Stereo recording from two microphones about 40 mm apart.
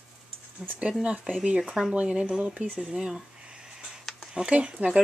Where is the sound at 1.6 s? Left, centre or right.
Centre.